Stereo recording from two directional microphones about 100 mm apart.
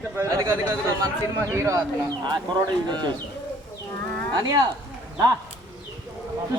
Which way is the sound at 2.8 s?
50° right (ahead or behind).